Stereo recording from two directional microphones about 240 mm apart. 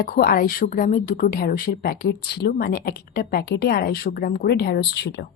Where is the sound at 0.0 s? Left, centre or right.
Left.